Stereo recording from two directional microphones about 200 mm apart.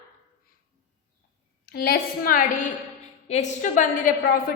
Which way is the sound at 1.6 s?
50° left (ahead or behind).